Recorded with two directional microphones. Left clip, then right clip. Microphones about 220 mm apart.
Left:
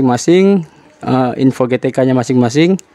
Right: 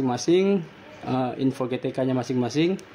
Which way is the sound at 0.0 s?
50° left (ahead or behind).